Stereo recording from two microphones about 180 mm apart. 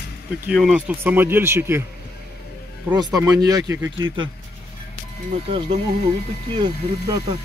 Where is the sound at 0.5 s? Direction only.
5° right (ahead or behind).